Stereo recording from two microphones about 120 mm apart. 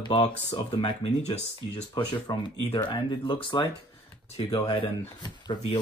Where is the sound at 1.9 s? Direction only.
45° left (ahead or behind).